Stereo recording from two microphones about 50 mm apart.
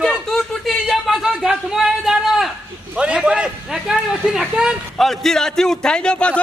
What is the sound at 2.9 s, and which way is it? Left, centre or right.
Speech, right.